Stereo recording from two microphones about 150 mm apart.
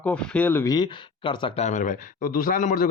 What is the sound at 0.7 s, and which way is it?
Speech, 30° left (ahead or behind).